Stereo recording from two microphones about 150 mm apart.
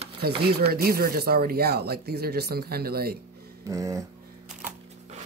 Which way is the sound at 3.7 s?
20° right (ahead or behind).